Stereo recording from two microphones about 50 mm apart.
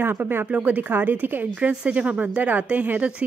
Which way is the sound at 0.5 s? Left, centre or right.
Right.